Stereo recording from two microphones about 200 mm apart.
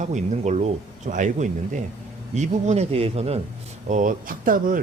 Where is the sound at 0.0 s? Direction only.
35° right (ahead or behind).